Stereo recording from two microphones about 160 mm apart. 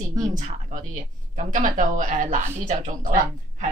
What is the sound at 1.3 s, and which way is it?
A woman's voice, 55° right (ahead or behind).